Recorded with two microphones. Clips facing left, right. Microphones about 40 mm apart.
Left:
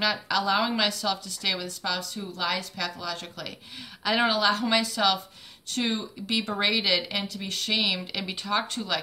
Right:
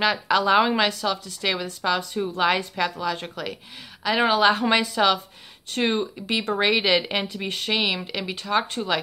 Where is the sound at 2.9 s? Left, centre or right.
Right.